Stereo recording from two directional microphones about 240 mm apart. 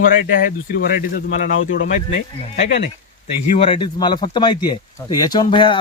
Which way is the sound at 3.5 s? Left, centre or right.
Left.